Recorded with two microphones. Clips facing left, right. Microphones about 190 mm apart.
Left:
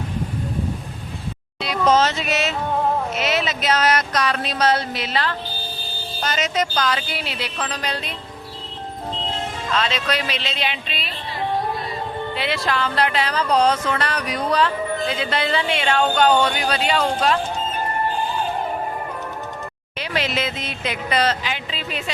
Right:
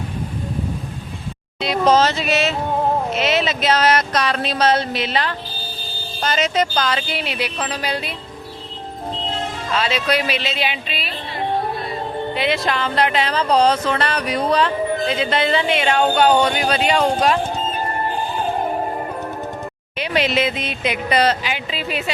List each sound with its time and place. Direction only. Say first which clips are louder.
1.6 s speech: right 2 dB; 30° right (ahead or behind)
6.2 s speech: right 3 dB; 30° right (ahead or behind); by 8.1 s 10° right (ahead or behind)
9.7 s speech: right 3 dB; 10° right (ahead or behind)
12.3 s speech: right 4 dB; 20° right (ahead or behind)
20.0 s speech: right 5 dB; 15° right (ahead or behind)